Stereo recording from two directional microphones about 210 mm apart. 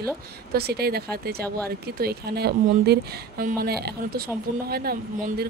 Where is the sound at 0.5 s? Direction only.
50° right (ahead or behind).